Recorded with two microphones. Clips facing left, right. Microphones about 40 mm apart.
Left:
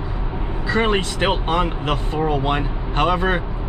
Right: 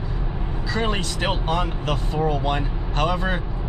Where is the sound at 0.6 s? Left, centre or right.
Left.